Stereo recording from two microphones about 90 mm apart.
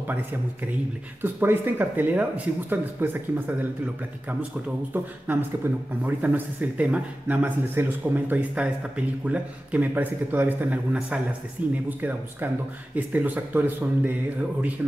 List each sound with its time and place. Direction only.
1.2 s a man's voice: 25° right (ahead or behind)